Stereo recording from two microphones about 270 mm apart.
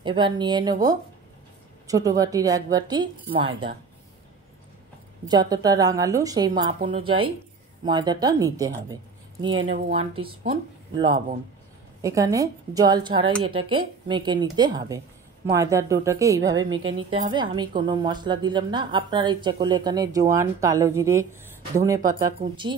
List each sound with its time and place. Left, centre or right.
0.0 s a woman's voice: centre
5.3 s a woman's voice: centre
9.5 s speech: right
10.5 s a woman's voice: centre